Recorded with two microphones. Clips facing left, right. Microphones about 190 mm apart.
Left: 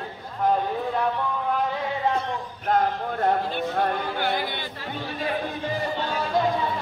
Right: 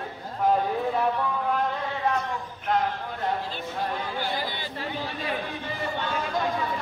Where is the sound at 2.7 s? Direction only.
50° left (ahead or behind).